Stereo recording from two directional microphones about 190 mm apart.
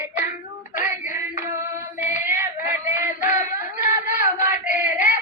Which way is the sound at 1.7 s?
10° right (ahead or behind).